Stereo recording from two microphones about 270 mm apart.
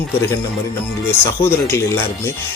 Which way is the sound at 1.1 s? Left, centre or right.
Centre.